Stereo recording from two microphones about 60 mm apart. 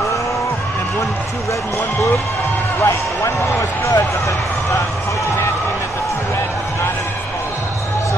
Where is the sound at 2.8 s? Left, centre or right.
Left.